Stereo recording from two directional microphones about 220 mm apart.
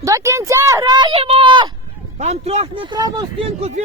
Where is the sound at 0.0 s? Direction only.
15° right (ahead or behind).